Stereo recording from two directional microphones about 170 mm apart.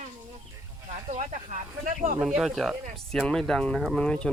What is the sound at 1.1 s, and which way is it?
Snake, 45° right (ahead or behind).